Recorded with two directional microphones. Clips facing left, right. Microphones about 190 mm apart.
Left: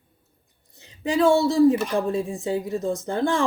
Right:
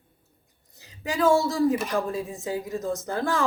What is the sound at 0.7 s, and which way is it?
Speech, 30° left (ahead or behind).